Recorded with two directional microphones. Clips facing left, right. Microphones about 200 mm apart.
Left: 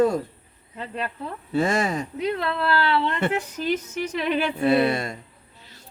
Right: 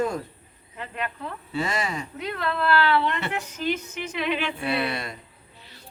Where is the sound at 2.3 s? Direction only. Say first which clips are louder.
Even; 30° left (ahead or behind).